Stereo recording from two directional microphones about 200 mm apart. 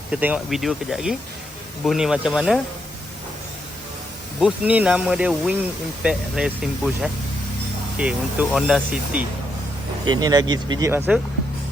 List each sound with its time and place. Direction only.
0.1 s speech: 5° right (ahead or behind)
4.4 s speech: 5° right (ahead or behind)
10.1 s speech: 20° right (ahead or behind)